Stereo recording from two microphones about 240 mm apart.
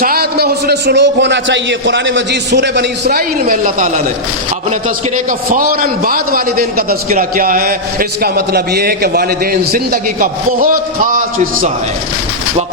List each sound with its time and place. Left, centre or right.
0.0 s a man's voice: right
5.1 s a man's voice: right